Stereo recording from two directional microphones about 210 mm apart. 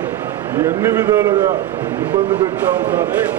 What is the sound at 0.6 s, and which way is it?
A man's voice, 15° right (ahead or behind).